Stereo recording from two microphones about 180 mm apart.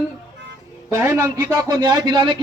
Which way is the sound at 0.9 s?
15° right (ahead or behind).